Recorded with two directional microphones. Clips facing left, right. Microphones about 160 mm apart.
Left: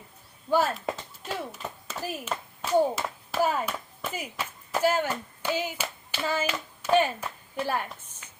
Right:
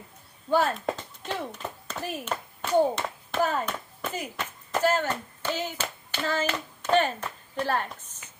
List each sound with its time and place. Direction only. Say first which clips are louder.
0.5 s speech: right 1 dB; 5° left (ahead or behind)
1.9 s clapping: right 1 dB; 5° left (ahead or behind)
4.0 s speech: right 2 dB; 5° left (ahead or behind)